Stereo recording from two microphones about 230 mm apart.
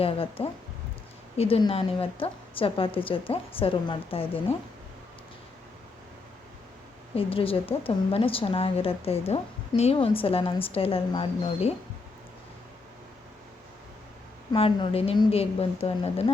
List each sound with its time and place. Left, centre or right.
0.0 s a woman's voice: left
7.2 s a woman's voice: left
14.5 s a woman's voice: left